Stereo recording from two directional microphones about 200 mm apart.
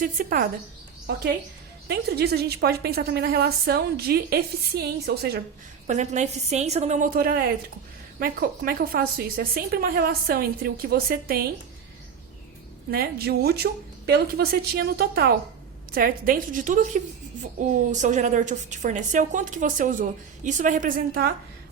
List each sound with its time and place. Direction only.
0.0 s a woman's voice: 45° right (ahead or behind)
1.9 s a woman's voice: 55° right (ahead or behind)
5.9 s a woman's voice: 35° right (ahead or behind)
12.9 s a woman's voice: 50° right (ahead or behind)